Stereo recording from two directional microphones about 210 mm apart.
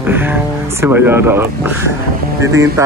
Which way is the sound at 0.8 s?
10° right (ahead or behind).